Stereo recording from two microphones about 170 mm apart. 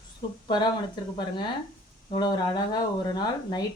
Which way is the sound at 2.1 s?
25° left (ahead or behind).